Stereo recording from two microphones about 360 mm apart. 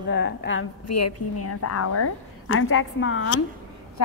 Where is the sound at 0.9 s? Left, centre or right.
Left.